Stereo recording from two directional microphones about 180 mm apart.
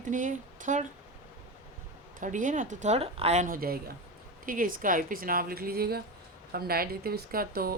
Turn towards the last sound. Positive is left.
turn(degrees=-55)  # may be behind; listen again after turning